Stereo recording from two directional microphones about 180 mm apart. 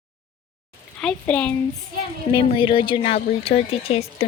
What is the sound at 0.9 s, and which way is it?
Speech, 5° left (ahead or behind).